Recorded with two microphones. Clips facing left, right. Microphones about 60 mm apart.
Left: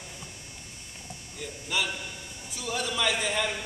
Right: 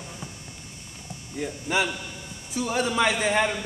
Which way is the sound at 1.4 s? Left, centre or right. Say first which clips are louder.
Right 6 dB; right.